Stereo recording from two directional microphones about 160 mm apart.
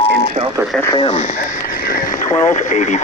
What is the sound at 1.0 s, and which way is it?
Speech, 40° left (ahead or behind).